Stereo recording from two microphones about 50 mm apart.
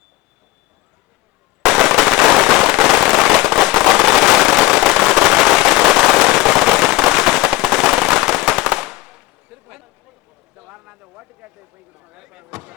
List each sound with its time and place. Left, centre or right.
1.6 s firecracker: centre
4.9 s firecracker: centre
7.8 s firecracker: right
8.0 s firecracker: centre
10.6 s a sound: right